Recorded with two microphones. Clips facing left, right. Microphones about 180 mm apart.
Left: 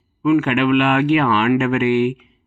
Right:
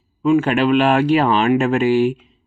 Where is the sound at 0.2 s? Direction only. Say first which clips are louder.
Even; 35° right (ahead or behind).